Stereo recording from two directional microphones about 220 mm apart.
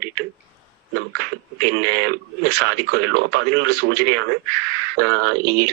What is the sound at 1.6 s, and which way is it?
Speech, 50° right (ahead or behind).